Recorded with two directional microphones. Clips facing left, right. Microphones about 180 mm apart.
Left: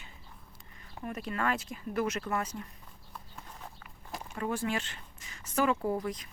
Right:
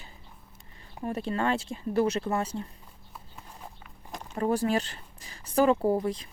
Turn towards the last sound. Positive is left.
turn(degrees=-30)  # may be behind; listen again after turning